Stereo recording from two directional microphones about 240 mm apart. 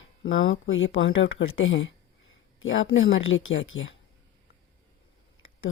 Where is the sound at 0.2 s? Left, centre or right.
Left.